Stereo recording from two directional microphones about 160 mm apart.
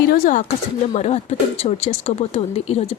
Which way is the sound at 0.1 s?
55° left (ahead or behind).